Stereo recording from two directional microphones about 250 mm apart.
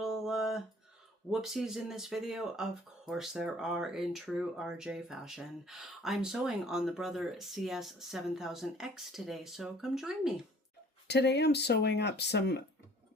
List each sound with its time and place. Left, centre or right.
0.0 s a sound: centre
1.3 s speech: centre
11.1 s speech: left